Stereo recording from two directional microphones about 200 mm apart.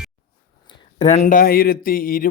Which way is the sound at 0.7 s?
30° left (ahead or behind).